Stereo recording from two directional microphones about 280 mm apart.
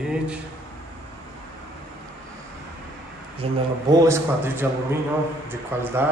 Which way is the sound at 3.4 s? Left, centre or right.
Right.